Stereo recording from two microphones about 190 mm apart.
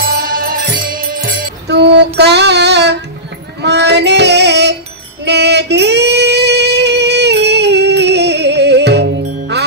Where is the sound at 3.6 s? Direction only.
60° right (ahead or behind).